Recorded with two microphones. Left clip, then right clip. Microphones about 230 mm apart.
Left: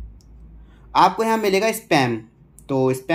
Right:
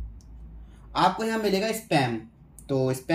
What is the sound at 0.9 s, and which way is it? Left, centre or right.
Speech, centre.